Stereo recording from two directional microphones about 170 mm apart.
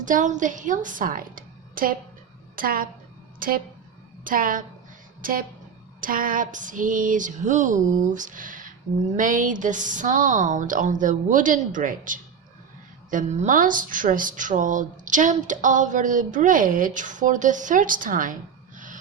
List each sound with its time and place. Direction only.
0.0 s a woman's voice: 50° right (ahead or behind)